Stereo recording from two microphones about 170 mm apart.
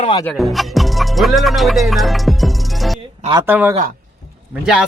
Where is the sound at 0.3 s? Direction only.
Centre (ahead or behind).